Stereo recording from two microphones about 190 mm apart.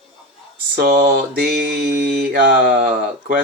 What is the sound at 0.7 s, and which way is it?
Mantra, 50° right (ahead or behind).